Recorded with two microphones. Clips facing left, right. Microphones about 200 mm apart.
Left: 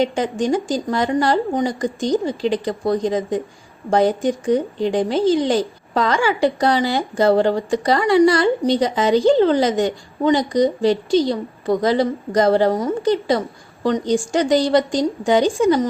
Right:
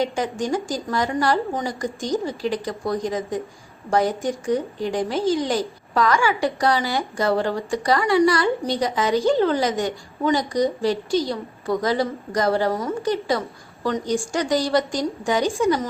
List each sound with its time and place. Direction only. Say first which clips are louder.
0.0 s a woman's voice: left 4 dB; 20° left (ahead or behind)